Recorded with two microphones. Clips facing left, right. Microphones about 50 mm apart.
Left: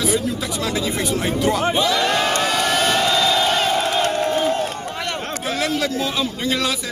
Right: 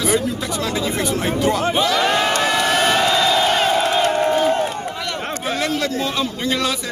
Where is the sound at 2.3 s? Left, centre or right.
Right.